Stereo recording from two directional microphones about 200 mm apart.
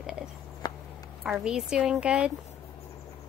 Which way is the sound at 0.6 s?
20° left (ahead or behind).